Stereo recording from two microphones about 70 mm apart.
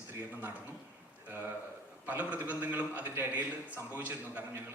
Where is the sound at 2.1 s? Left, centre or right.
Right.